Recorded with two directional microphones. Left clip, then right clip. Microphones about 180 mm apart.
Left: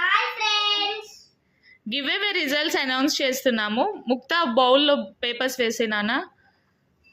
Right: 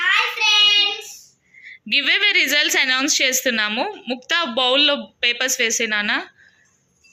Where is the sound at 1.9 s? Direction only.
15° left (ahead or behind).